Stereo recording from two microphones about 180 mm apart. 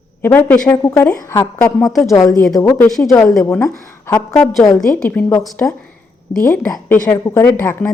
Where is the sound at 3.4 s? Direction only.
15° left (ahead or behind).